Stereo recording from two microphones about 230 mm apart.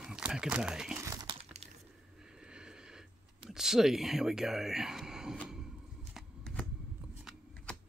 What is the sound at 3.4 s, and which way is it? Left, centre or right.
Speech, centre.